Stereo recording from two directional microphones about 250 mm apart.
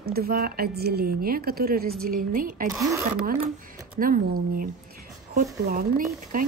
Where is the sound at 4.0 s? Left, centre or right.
Right.